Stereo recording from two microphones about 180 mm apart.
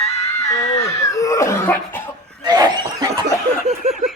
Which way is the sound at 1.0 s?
15° left (ahead or behind).